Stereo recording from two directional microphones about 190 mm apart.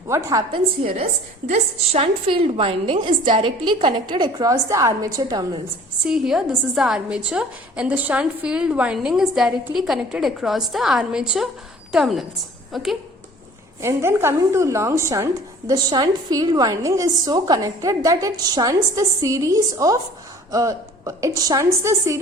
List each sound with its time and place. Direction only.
0.1 s a woman's voice: 20° right (ahead or behind)
0.8 s a woman's voice: 30° right (ahead or behind)
6.1 s a woman's voice: centre (ahead or behind)
13.8 s a woman's voice: 15° right (ahead or behind)